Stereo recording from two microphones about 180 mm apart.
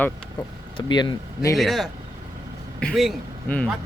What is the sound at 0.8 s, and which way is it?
Speech, 25° left (ahead or behind).